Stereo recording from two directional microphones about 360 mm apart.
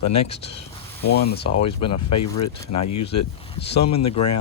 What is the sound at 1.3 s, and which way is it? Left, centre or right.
Speech, left.